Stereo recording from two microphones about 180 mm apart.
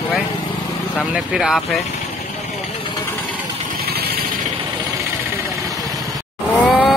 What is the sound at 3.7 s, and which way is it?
Vehicle, 60° right (ahead or behind).